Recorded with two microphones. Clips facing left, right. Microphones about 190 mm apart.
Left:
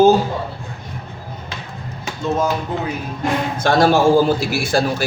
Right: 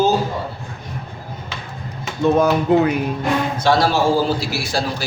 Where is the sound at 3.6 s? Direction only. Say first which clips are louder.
Left 4 dB; 50° left (ahead or behind).